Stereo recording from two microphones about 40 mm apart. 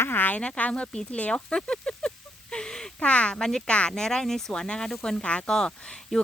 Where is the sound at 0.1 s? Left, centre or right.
Left.